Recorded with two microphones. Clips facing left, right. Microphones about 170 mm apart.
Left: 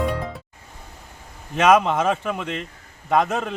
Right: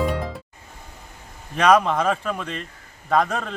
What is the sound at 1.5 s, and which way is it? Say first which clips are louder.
A man's voice: left 1 dB; 20° left (ahead or behind).